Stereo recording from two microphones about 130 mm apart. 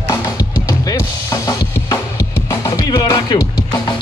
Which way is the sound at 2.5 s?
25° left (ahead or behind).